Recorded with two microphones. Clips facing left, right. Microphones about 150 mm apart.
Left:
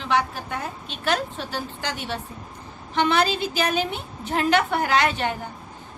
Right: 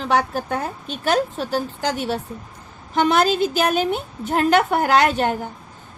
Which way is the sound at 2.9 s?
45° right (ahead or behind).